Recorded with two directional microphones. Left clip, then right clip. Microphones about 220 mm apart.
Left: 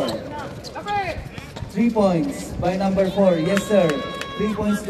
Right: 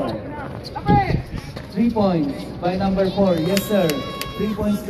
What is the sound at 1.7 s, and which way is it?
Speech, 55° left (ahead or behind).